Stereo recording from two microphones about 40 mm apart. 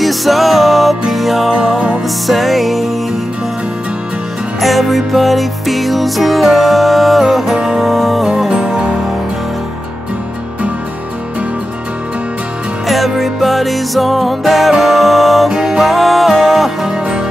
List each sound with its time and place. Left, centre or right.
0.0 s music: centre
4.6 s music: centre
12.8 s music: centre
15.5 s music: centre
15.8 s music: centre
16.9 s music: centre